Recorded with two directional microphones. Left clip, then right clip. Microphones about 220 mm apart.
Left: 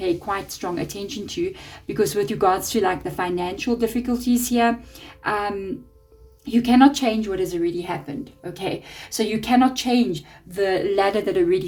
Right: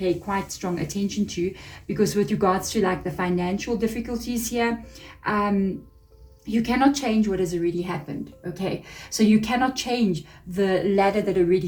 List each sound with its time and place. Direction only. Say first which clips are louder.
0.0 s a woman's voice: left 1 dB; 50° left (ahead or behind)